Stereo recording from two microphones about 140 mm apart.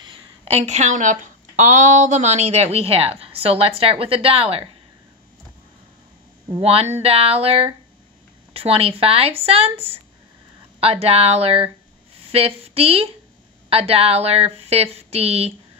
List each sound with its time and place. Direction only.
0.0 s speech: 40° right (ahead or behind)
6.5 s speech: 45° right (ahead or behind)